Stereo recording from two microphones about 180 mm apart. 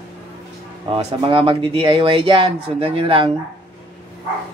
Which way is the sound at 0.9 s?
30° right (ahead or behind).